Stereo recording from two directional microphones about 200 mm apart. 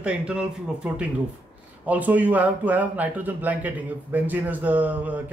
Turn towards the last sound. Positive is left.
turn(degrees=-10)  # may be behind; listen again after turning